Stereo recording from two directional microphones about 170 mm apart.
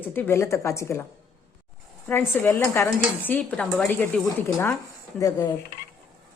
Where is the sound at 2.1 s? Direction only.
10° left (ahead or behind).